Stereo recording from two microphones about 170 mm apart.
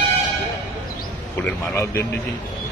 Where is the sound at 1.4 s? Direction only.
15° left (ahead or behind).